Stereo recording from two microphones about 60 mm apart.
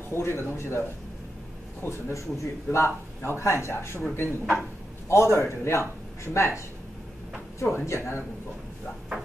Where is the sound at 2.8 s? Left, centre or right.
Left.